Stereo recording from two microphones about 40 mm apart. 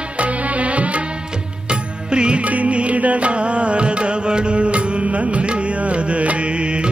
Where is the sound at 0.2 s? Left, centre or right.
Right.